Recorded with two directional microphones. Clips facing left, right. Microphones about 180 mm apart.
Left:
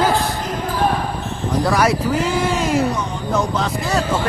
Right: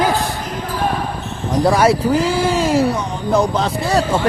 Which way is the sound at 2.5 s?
30° right (ahead or behind).